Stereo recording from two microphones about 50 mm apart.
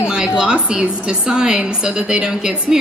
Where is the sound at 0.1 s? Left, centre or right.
Centre.